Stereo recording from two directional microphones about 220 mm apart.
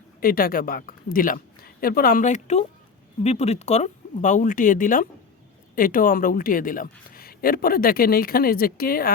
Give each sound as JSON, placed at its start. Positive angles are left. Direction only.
{"t": 0.2, "sound": "a woman's voice", "side_deg": 40}